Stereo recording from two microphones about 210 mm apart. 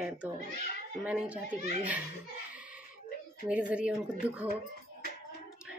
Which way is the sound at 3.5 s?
5° right (ahead or behind).